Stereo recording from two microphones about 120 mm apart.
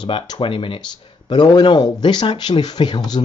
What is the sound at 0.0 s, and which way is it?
Speech, 40° left (ahead or behind).